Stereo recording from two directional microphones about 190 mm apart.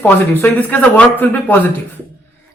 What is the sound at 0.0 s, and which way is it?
Speech, 10° left (ahead or behind).